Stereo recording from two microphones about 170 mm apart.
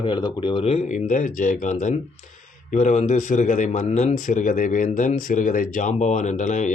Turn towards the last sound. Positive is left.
turn(degrees=45)  # may be behind; listen again after turning